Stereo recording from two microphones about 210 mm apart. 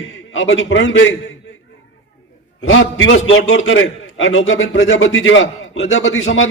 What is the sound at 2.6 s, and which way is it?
A man's voice, 65° left (ahead or behind).